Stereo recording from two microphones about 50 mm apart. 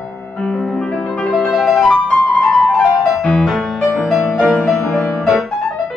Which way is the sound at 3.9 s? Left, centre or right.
Centre.